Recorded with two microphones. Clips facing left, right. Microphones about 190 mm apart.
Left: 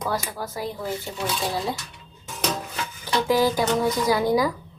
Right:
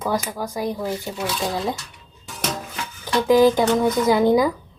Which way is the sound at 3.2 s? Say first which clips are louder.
Right 7 dB; 20° right (ahead or behind).